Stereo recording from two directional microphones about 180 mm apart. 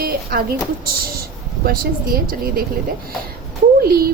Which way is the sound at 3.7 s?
55° right (ahead or behind).